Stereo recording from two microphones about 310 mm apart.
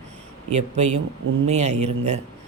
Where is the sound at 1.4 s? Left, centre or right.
Right.